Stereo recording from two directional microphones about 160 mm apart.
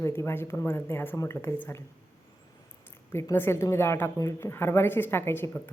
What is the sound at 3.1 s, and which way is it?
A woman's voice, 15° left (ahead or behind).